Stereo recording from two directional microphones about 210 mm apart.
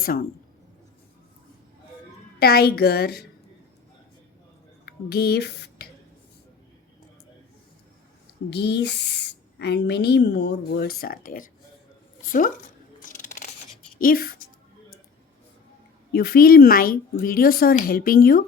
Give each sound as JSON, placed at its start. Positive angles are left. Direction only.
{"t": 0.0, "sound": "speech", "side_deg": 45}
{"t": 2.4, "sound": "speech", "side_deg": 50}
{"t": 4.9, "sound": "speech", "side_deg": 50}
{"t": 8.4, "sound": "speech", "side_deg": 55}
{"t": 13.0, "sound": "a sound", "side_deg": 40}
{"t": 14.0, "sound": "speech", "side_deg": 45}
{"t": 16.1, "sound": "speech", "side_deg": 45}